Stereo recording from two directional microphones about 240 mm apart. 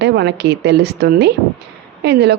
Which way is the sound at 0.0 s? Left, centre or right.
Right.